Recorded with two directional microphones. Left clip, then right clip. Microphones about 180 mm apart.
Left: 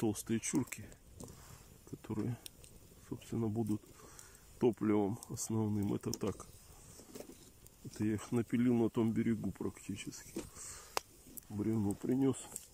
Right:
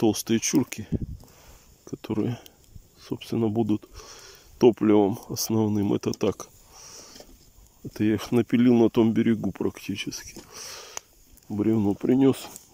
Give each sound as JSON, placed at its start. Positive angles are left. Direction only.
{"t": 0.0, "sound": "speech", "side_deg": -40}
{"t": 0.5, "sound": "speech", "side_deg": -60}
{"t": 2.0, "sound": "speech", "side_deg": -55}
{"t": 7.9, "sound": "speech", "side_deg": -50}
{"t": 11.5, "sound": "speech", "side_deg": -55}